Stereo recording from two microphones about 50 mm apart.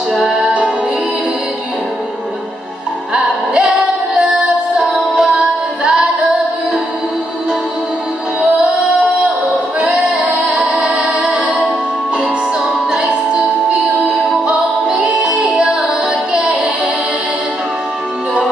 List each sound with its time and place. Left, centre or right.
0.1 s music: centre
3.1 s music: centre
8.4 s music: right
10.8 s music: centre
12.9 s music: centre
14.5 s music: right
16.3 s child singing: centre